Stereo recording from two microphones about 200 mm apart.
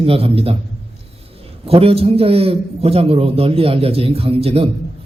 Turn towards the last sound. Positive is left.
turn(degrees=-30)  # may be behind; listen again after turning